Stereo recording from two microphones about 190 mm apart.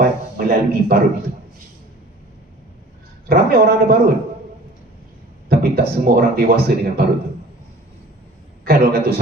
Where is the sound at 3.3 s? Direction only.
55° right (ahead or behind).